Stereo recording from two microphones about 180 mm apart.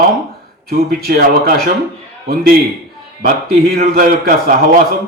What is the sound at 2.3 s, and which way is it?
Speech, 55° right (ahead or behind).